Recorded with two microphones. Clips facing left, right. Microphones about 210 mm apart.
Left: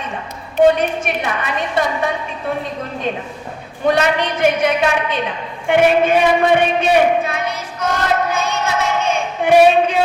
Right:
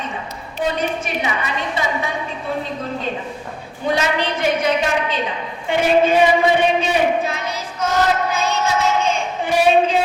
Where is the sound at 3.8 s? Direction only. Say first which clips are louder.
Left 4 dB; 60° left (ahead or behind).